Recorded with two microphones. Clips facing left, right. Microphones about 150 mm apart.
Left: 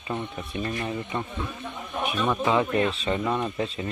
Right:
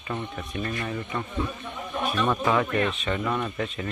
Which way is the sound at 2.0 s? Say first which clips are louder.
Even; 10° left (ahead or behind).